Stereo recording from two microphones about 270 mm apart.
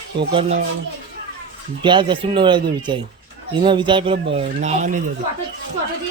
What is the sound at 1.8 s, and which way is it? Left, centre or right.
Speech, centre.